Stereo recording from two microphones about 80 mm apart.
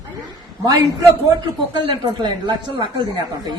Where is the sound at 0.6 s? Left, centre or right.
Right.